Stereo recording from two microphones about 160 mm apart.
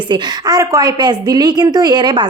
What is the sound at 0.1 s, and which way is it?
A woman's voice, 25° right (ahead or behind).